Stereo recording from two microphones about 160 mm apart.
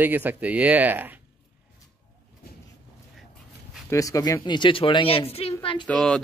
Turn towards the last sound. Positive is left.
turn(degrees=5)  # may be behind; listen again after turning